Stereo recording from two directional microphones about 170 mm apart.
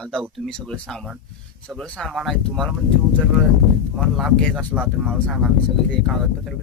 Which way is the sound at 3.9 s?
Centre (ahead or behind).